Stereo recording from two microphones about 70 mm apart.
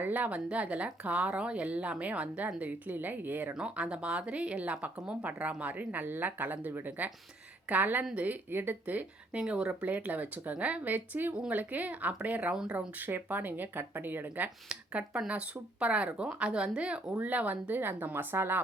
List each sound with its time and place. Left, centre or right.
0.0 s speech: right
3.5 s speech: centre; by 18.6 s right